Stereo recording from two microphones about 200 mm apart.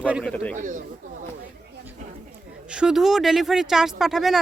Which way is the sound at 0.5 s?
40° right (ahead or behind).